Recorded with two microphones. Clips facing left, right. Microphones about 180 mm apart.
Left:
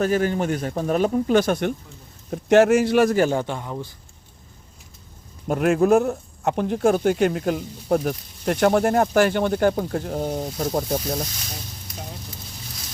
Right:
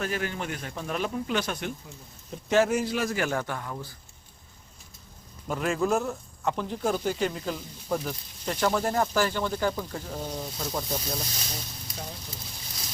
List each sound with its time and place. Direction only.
0.0 s speech: 40° left (ahead or behind)
2.3 s speech: 70° left (ahead or behind)
3.2 s speech: 25° left (ahead or behind)
5.5 s speech: 60° left (ahead or behind); by 11.2 s 40° left (ahead or behind)